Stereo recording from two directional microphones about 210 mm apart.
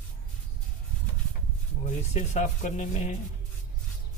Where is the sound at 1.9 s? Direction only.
35° left (ahead or behind).